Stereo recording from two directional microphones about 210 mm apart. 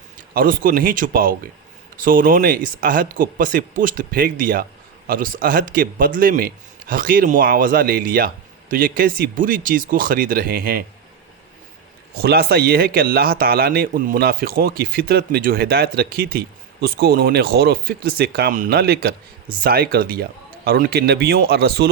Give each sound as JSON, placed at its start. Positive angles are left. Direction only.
{"t": 0.2, "sound": "speech", "side_deg": -40}
{"t": 12.1, "sound": "speech", "side_deg": -45}